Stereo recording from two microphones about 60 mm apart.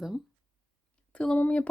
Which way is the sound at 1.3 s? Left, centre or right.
Left.